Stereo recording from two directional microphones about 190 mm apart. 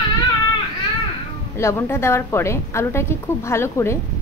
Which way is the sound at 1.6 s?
15° left (ahead or behind).